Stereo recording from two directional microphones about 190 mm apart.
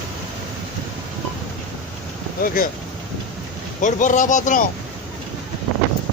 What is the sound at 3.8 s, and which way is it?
Speech, 40° left (ahead or behind).